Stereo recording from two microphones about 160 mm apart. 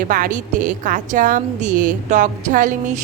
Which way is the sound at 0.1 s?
55° right (ahead or behind).